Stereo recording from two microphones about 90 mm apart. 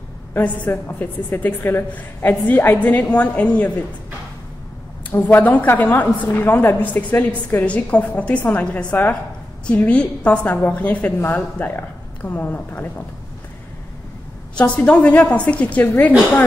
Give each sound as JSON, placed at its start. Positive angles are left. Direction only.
{"t": 0.3, "sound": "a woman's voice", "side_deg": 25}
{"t": 5.1, "sound": "a woman's voice", "side_deg": 20}
{"t": 14.6, "sound": "a woman's voice", "side_deg": 15}